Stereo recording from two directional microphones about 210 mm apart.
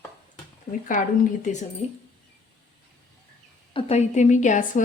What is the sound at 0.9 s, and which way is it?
Speech, 40° left (ahead or behind).